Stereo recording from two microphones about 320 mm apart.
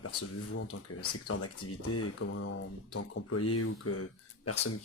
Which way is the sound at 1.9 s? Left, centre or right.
Left.